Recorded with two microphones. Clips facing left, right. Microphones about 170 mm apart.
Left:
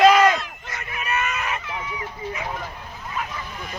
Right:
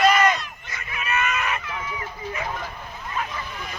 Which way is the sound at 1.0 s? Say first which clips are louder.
Right 1 dB; 30° left (ahead or behind).